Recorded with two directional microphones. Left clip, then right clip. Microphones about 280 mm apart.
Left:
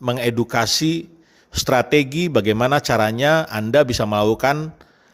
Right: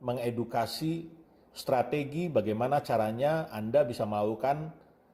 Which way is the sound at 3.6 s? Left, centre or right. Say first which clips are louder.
Left 11 dB; left.